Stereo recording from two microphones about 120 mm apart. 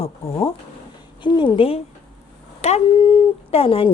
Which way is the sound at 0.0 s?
55° left (ahead or behind).